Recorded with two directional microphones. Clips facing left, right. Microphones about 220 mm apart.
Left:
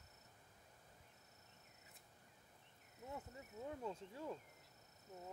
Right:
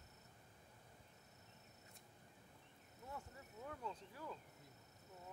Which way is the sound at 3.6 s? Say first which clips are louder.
Left 3 dB; 25° left (ahead or behind).